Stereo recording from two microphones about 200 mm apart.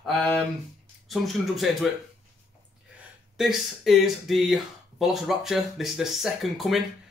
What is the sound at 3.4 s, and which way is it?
Speech, centre (ahead or behind).